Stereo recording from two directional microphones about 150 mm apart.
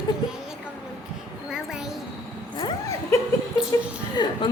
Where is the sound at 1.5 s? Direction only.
5° right (ahead or behind).